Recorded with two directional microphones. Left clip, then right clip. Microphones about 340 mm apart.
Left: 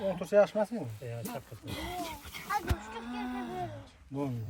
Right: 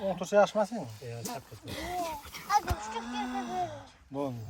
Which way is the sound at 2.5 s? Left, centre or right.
Right.